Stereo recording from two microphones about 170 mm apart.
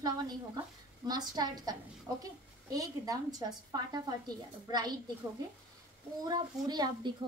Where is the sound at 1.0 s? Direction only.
25° right (ahead or behind).